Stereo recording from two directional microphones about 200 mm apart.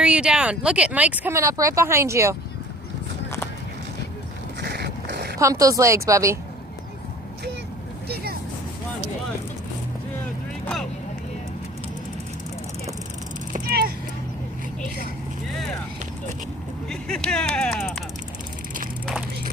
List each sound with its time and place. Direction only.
0.0 s speech: 5° right (ahead or behind)
4.6 s a sound: 55° right (ahead or behind)
5.4 s speech: 15° right (ahead or behind)
8.0 s vehicle: 50° right (ahead or behind)
13.5 s vehicle: 50° right (ahead or behind)
16.9 s speech: 5° left (ahead or behind)